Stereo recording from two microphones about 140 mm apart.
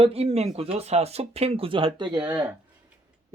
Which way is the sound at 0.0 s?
45° right (ahead or behind).